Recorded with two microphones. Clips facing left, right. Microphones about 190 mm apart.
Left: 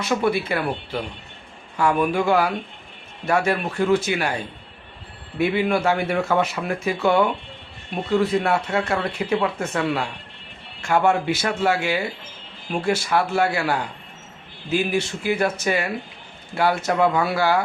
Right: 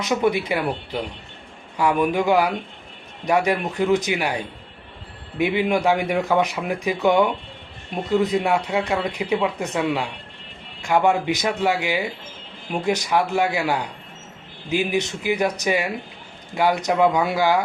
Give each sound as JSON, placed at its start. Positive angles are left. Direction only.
{"t": 0.0, "sound": "speech", "side_deg": -15}